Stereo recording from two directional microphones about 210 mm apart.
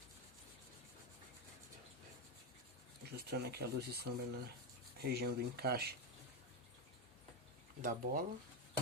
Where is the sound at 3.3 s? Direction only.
50° right (ahead or behind).